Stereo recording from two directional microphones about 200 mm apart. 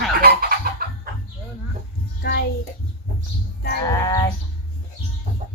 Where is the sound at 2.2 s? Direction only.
50° left (ahead or behind).